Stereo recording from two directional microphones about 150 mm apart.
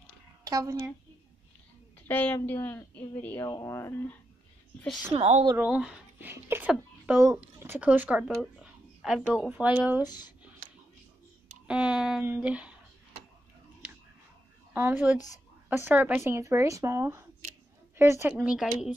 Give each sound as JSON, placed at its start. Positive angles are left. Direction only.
{"t": 0.4, "sound": "a woman's voice", "side_deg": -25}
{"t": 2.0, "sound": "a woman's voice", "side_deg": 10}
{"t": 4.7, "sound": "speech", "side_deg": 0}
{"t": 5.1, "sound": "a woman's voice", "side_deg": -40}
{"t": 5.6, "sound": "speech", "side_deg": -5}
{"t": 10.0, "sound": "speech", "side_deg": 25}
{"t": 11.6, "sound": "speech", "side_deg": -5}
{"t": 14.7, "sound": "a woman's voice", "side_deg": -15}
{"t": 18.3, "sound": "speech", "side_deg": -5}